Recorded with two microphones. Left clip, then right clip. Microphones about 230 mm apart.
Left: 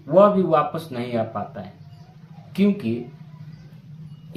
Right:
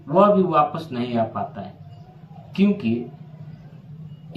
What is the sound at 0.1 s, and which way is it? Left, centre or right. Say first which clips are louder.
Speech: left 1 dB; centre.